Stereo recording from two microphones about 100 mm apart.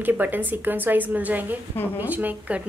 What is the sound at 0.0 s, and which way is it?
Speech, 20° right (ahead or behind).